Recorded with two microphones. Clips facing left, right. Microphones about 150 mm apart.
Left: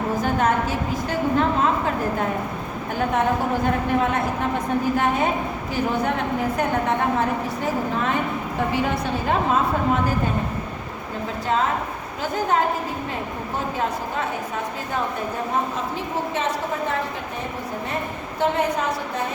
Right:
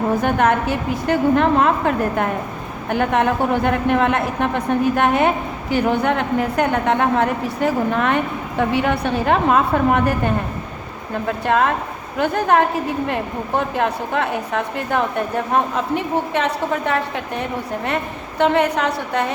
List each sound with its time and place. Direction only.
0.2 s a woman's voice: 65° right (ahead or behind)
2.9 s a woman's voice: 70° right (ahead or behind)
16.3 s a woman's voice: 65° right (ahead or behind)